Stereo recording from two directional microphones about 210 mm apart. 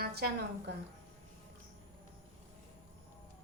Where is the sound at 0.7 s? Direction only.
55° right (ahead or behind).